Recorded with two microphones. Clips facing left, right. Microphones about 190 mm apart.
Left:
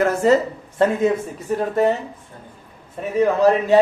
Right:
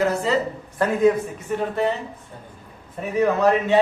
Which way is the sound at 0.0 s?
50° left (ahead or behind).